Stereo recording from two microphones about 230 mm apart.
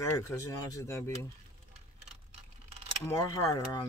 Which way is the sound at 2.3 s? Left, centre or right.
Right.